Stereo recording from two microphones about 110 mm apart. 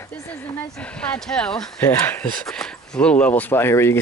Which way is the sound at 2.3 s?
5° left (ahead or behind).